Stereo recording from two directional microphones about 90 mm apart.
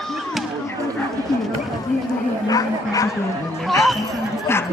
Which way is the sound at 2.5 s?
40° left (ahead or behind).